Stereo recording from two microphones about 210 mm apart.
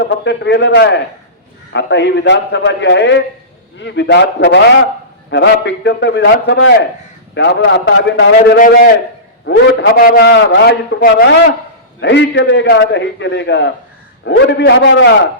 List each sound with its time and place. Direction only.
0.3 s a man's voice: 55° left (ahead or behind)